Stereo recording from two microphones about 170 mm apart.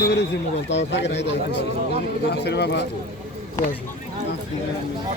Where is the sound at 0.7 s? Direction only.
90° left.